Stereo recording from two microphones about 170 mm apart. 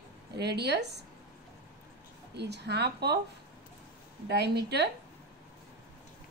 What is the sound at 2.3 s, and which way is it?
Speech, 85° right.